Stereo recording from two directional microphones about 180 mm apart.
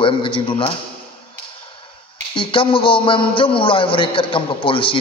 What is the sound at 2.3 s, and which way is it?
A man's voice, 30° left (ahead or behind).